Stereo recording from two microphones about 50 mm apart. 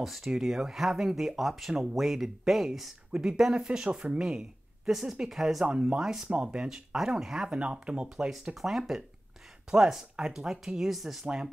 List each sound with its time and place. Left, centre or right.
0.0 s speech: centre
5.7 s speech: right
8.3 s speech: centre